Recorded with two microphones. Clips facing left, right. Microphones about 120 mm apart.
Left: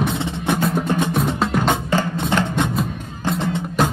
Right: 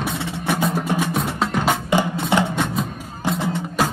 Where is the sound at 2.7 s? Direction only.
Centre (ahead or behind).